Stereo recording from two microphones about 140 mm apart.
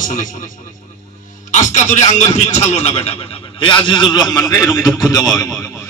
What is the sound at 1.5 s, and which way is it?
A man's voice, 60° left (ahead or behind).